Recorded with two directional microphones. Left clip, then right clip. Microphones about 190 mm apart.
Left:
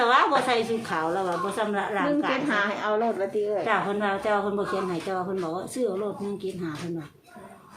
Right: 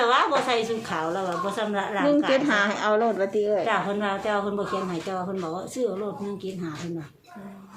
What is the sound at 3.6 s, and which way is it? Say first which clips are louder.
A woman's voice: even; centre (ahead or behind).